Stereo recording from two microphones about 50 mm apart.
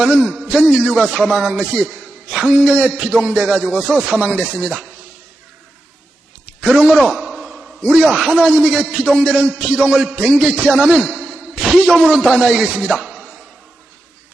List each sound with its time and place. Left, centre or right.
0.0 s a man's voice: centre
6.6 s speech: centre
7.1 s a sound: centre
7.8 s a man's voice: right
8.0 s a man's voice: centre
8.4 s speech: right
8.9 s a man's voice: centre
9.2 s a man's voice: right
12.0 s a man's voice: centre
12.9 s a sound: centre